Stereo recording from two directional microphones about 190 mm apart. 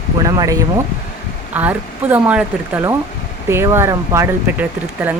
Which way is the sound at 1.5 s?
10° right (ahead or behind).